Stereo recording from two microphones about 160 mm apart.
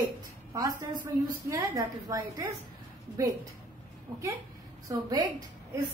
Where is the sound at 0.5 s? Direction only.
20° right (ahead or behind).